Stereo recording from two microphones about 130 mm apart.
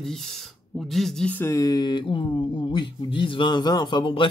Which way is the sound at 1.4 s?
25° left (ahead or behind).